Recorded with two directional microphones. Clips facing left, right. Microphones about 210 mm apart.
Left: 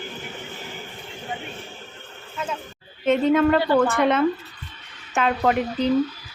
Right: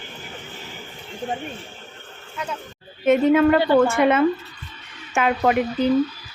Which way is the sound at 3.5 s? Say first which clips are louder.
Right 2 dB; 20° right (ahead or behind).